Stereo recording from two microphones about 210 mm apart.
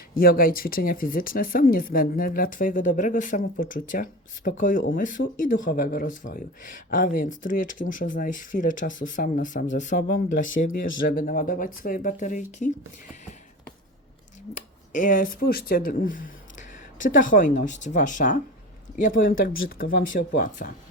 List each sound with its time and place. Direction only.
0.1 s speech: 45° left (ahead or behind)
5.2 s speech: 55° left (ahead or behind)
5.6 s speech: 45° left (ahead or behind)
14.5 s speech: 40° left (ahead or behind)